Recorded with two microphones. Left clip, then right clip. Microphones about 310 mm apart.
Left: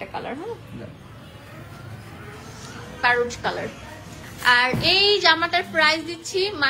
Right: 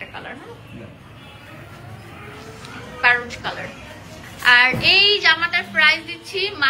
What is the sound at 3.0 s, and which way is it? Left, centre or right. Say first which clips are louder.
A woman's voice: right 2 dB; centre.